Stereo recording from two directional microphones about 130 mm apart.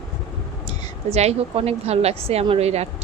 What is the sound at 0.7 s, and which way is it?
A woman's voice, 55° right (ahead or behind).